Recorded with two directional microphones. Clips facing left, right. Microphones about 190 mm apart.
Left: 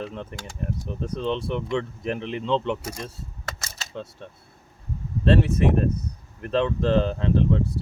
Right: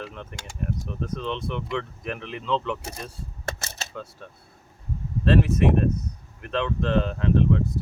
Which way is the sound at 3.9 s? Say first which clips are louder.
Left 2 dB; 25° left (ahead or behind).